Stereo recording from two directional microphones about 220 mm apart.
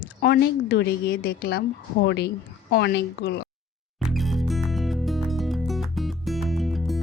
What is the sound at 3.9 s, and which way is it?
Music, centre (ahead or behind).